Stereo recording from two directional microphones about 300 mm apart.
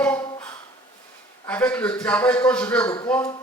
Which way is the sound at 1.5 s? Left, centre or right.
Centre.